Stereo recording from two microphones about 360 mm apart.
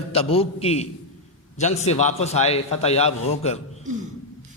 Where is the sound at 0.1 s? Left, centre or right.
Centre.